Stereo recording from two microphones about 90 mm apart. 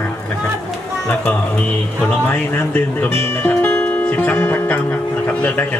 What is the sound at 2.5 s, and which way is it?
Speech, 20° left (ahead or behind).